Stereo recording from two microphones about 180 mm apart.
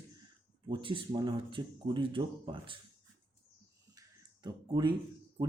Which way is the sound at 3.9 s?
20° right (ahead or behind).